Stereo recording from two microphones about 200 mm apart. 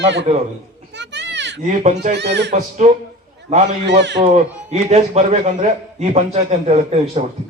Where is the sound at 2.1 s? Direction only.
60° right (ahead or behind).